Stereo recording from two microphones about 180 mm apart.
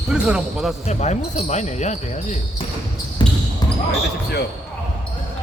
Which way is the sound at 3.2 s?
25° left (ahead or behind).